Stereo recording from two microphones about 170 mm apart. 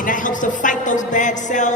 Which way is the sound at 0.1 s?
50° left (ahead or behind).